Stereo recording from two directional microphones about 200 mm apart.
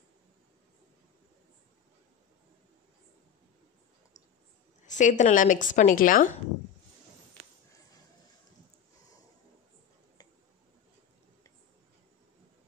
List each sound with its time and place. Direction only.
4.8 s speech: 40° left (ahead or behind)